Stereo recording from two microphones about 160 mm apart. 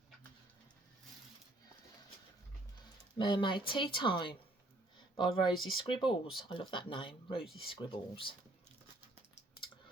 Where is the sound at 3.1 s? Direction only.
30° left (ahead or behind).